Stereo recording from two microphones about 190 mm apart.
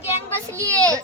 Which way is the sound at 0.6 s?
15° right (ahead or behind).